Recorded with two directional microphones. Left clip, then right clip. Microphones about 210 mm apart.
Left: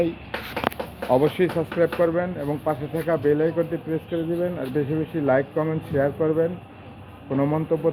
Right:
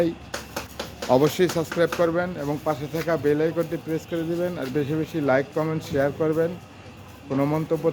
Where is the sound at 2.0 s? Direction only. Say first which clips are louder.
Left 1 dB; 20° right (ahead or behind).